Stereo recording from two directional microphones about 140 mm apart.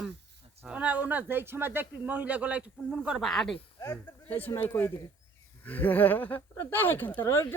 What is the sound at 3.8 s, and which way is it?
Speech, 15° left (ahead or behind).